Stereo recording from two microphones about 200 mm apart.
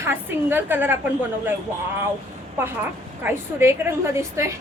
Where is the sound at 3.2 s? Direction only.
10° right (ahead or behind).